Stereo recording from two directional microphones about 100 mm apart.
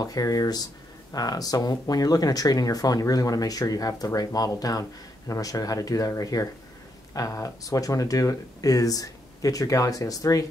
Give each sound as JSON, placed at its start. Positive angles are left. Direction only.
{"t": 0.0, "sound": "speech", "side_deg": 40}